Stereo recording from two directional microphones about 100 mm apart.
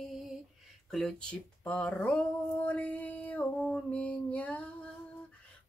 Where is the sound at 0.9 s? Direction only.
5° left (ahead or behind).